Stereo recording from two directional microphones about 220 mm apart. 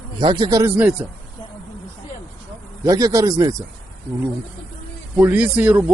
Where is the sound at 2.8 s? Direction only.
15° right (ahead or behind).